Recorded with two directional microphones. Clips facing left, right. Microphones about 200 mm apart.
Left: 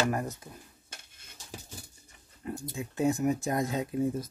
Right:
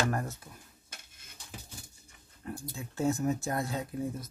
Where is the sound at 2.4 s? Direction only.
20° left (ahead or behind).